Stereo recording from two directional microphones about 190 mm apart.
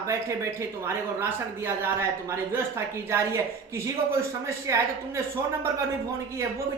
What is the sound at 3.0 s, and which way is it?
Speech, 15° right (ahead or behind).